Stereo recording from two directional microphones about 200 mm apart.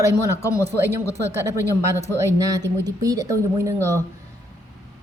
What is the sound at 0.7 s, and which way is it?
Speech, 15° right (ahead or behind).